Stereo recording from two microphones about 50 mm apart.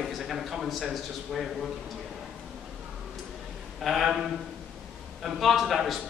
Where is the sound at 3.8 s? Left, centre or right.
Centre.